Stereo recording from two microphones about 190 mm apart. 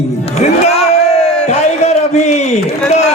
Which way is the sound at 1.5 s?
35° left (ahead or behind).